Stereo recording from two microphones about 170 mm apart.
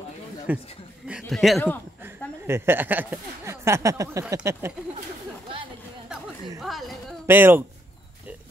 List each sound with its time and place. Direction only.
0.5 s speech: 10° right (ahead or behind)
2.0 s speech: 15° right (ahead or behind)
6.6 s a sound: centre (ahead or behind)
7.2 s speech: 10° right (ahead or behind)